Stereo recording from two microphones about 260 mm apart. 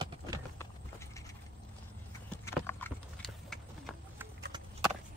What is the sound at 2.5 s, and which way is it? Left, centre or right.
Clip-clop, centre.